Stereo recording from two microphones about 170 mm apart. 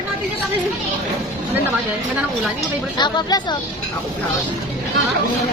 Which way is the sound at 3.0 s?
25° left (ahead or behind).